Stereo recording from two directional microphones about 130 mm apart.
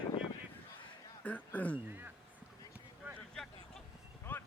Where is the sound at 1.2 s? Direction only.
10° left (ahead or behind).